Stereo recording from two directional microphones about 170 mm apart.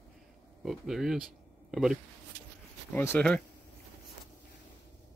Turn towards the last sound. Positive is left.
turn(degrees=10)  # may be behind; listen again after turning